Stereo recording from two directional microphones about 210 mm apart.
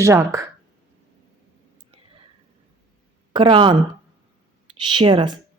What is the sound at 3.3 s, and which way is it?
Speech, 25° right (ahead or behind).